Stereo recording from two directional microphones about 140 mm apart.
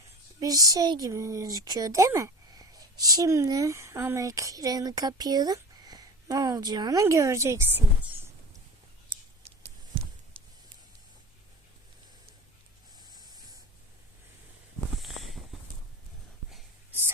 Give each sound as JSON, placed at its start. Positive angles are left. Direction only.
{"t": 0.3, "sound": "speech", "side_deg": -25}
{"t": 10.3, "sound": "spray", "side_deg": -40}
{"t": 13.0, "sound": "spray", "side_deg": -30}
{"t": 15.0, "sound": "a sound", "side_deg": 0}